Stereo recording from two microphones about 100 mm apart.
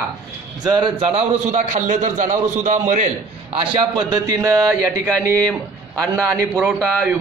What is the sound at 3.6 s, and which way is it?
A man's voice, 55° right (ahead or behind).